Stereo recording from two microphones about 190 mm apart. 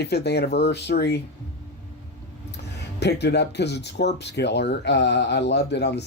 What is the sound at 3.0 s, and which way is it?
Speech, 60° left (ahead or behind).